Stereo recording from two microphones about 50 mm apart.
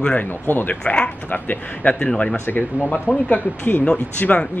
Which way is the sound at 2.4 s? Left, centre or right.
Left.